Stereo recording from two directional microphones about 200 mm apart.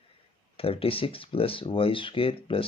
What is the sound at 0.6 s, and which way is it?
Speech, 30° left (ahead or behind).